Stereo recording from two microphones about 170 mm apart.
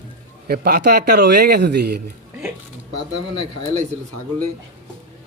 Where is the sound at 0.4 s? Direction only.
65° right (ahead or behind).